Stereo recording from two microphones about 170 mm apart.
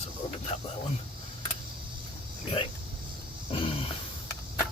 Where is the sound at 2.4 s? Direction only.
35° left (ahead or behind).